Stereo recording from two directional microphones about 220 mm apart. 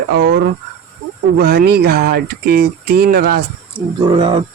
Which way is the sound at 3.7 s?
20° right (ahead or behind).